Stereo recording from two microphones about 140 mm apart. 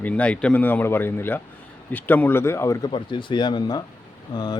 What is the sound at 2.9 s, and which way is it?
Speech, 35° left (ahead or behind).